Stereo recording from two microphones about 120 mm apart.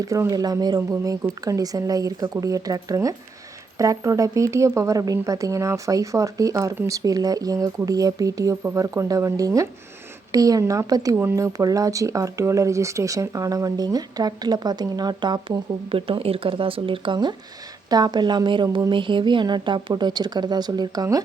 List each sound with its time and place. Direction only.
0.0 s speech: 30° right (ahead or behind)
15.9 s speech: 50° right (ahead or behind); by 21.2 s 30° right (ahead or behind)